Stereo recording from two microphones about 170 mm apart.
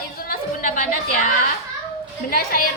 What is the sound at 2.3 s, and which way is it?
Speech, 60° left (ahead or behind).